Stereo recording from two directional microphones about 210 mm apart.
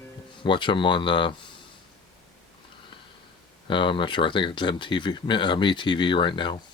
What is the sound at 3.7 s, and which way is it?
Speech, 25° left (ahead or behind).